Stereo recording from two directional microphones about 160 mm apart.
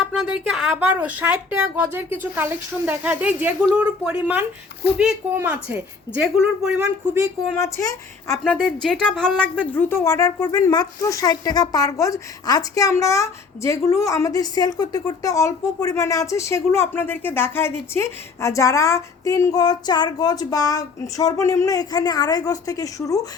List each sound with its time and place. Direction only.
0.0 s speech: 5° right (ahead or behind)
6.8 s speech: 20° right (ahead or behind)
7.5 s speech: 15° left (ahead or behind)
8.8 s a woman's voice: 5° left (ahead or behind); by 23.2 s 20° left (ahead or behind)